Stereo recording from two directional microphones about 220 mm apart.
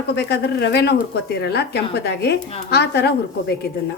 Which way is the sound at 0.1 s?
50° left (ahead or behind).